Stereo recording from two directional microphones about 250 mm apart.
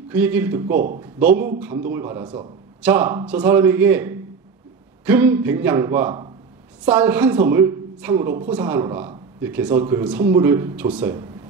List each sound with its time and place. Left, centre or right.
0.1 s speech: centre
0.7 s speech: right
1.0 s speech: centre